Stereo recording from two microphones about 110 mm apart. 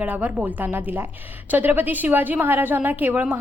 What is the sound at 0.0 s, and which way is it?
A woman's voice, 15° right (ahead or behind).